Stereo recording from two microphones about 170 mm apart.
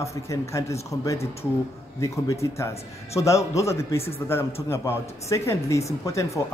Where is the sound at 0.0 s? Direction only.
15° left (ahead or behind).